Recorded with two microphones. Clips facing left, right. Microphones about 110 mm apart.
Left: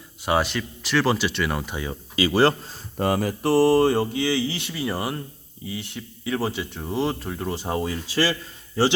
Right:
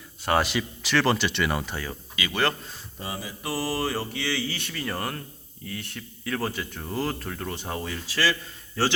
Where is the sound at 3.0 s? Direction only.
65° left (ahead or behind).